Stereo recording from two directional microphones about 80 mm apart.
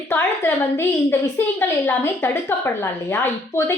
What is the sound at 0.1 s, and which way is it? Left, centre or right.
A woman's voice, left.